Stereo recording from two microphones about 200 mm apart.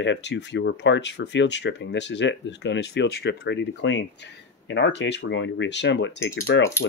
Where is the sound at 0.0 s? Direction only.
60° left (ahead or behind).